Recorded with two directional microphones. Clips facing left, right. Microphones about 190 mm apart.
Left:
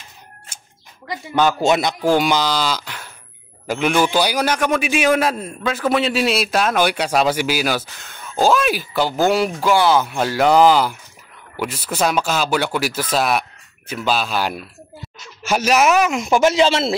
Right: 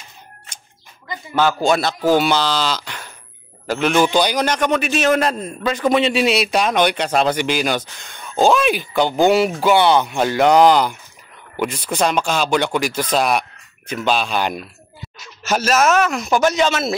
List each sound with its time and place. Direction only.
1.6 s a man's voice: 20° left (ahead or behind)